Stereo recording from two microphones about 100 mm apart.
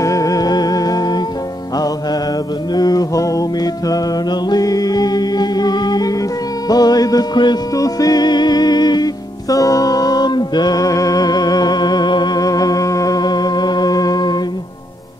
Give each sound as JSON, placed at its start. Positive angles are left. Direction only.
{"t": 0.0, "sound": "music", "side_deg": 35}
{"t": 2.7, "sound": "music", "side_deg": 40}